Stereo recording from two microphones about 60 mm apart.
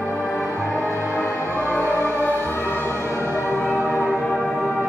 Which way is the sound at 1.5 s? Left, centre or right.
Left.